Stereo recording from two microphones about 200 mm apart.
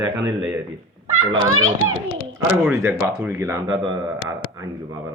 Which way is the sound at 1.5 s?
90° right.